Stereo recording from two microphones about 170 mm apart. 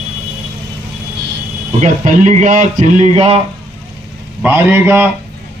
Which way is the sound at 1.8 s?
50° right (ahead or behind).